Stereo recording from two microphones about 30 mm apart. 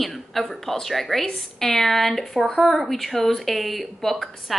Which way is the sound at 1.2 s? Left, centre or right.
Centre.